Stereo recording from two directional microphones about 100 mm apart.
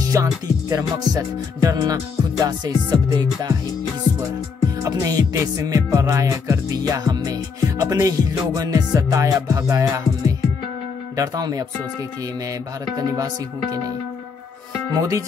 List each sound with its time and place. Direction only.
0.0 s music: 35° right (ahead or behind)
4.1 s music: 20° left (ahead or behind)
4.8 s music: 35° right (ahead or behind)
11.1 s music: 35° right (ahead or behind)
12.9 s music: 35° right (ahead or behind)
15.0 s music: 35° right (ahead or behind)